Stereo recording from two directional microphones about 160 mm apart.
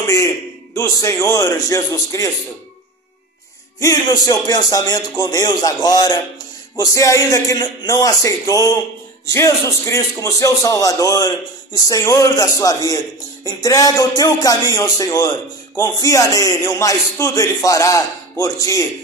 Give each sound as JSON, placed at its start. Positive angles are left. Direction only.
{"t": 0.0, "sound": "a sound", "side_deg": 20}
{"t": 0.7, "sound": "a man's voice", "side_deg": 20}
{"t": 3.8, "sound": "a man's voice", "side_deg": 25}